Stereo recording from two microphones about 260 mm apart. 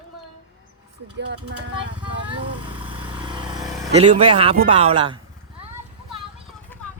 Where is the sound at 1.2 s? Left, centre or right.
Right.